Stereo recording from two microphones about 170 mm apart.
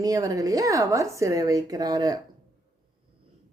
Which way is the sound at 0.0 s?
20° right (ahead or behind).